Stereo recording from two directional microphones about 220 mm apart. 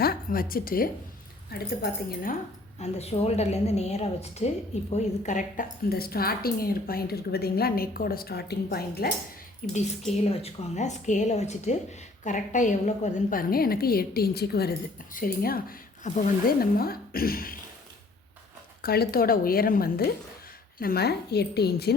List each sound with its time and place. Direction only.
0.0 s a woman's voice: 45° left (ahead or behind)
2.7 s a woman's voice: 30° left (ahead or behind); by 9.0 s 45° left (ahead or behind)
9.6 s a woman's voice: 35° left (ahead or behind)
18.8 s a woman's voice: 45° left (ahead or behind)